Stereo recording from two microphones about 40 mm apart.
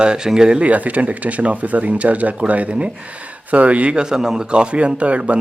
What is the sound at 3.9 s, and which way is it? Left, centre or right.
A man's voice, centre.